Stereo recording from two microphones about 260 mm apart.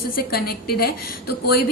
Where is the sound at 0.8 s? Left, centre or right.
Left.